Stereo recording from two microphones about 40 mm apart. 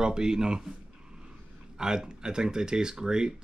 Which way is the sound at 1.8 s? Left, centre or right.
Centre.